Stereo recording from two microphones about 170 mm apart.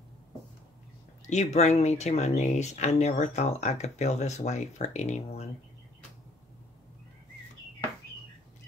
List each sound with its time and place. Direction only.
1.3 s speech: 40° left (ahead or behind)